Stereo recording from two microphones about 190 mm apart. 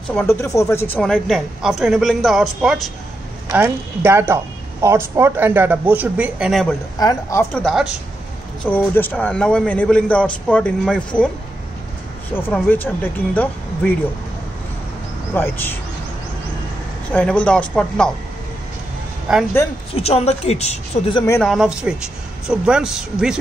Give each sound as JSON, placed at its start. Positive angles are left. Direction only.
{"t": 0.1, "sound": "a man's voice", "side_deg": 10}
{"t": 0.9, "sound": "a woman's voice", "side_deg": 5}
{"t": 3.5, "sound": "speech", "side_deg": -10}
{"t": 7.0, "sound": "a man's voice", "side_deg": 15}
{"t": 7.6, "sound": "a woman's voice", "side_deg": 0}
{"t": 8.6, "sound": "a man's voice", "side_deg": 10}
{"t": 12.4, "sound": "a man's voice", "side_deg": 10}
{"t": 15.3, "sound": "a man's voice", "side_deg": 10}
{"t": 17.1, "sound": "a woman's voice", "side_deg": 5}
{"t": 19.3, "sound": "a woman's voice", "side_deg": 0}
{"t": 20.0, "sound": "a woman's voice", "side_deg": 35}
{"t": 21.4, "sound": "a woman's voice", "side_deg": 0}